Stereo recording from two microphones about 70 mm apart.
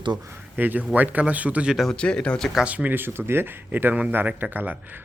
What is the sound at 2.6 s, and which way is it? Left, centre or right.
Speech, right.